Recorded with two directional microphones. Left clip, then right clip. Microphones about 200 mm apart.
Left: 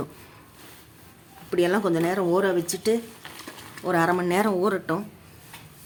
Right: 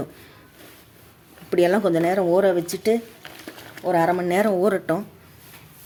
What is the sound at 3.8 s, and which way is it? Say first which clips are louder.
Speech: right 3 dB; centre (ahead or behind).